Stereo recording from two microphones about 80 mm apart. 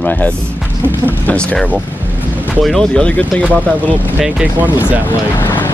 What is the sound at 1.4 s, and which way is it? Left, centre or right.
Speech, centre.